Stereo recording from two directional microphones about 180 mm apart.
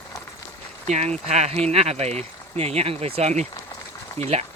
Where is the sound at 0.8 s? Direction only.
40° right (ahead or behind).